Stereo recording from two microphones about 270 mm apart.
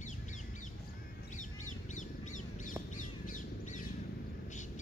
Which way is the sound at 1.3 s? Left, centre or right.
Left.